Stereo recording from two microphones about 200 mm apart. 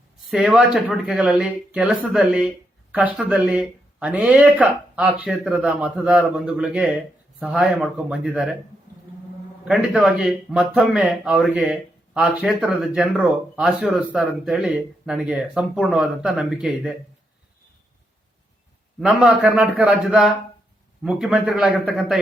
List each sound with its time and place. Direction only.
0.3 s speech: 5° right (ahead or behind)
9.6 s speech: centre (ahead or behind)
19.2 s speech: 5° right (ahead or behind)